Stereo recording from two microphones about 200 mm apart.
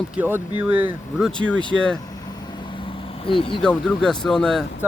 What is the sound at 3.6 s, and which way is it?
Speech, 5° left (ahead or behind).